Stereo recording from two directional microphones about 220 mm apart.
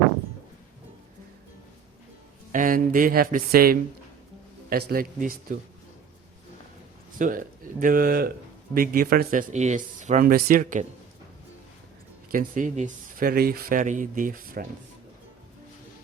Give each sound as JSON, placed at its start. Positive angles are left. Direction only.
{"t": 2.5, "sound": "speech", "side_deg": -40}
{"t": 4.9, "sound": "speech", "side_deg": -40}
{"t": 7.2, "sound": "speech", "side_deg": -40}
{"t": 12.3, "sound": "speech", "side_deg": -40}